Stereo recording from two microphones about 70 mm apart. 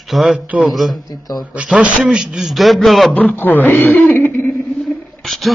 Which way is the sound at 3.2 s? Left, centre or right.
Left.